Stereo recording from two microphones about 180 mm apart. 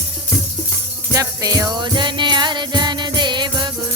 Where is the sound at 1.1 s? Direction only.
20° right (ahead or behind).